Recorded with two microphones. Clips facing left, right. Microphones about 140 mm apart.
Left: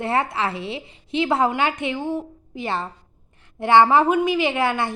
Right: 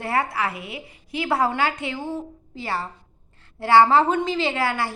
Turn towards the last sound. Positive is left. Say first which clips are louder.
# left 2 dB
turn(degrees=20)  # may be behind; listen again after turning